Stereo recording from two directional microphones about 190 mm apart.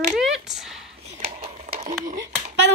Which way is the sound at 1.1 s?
40° right (ahead or behind).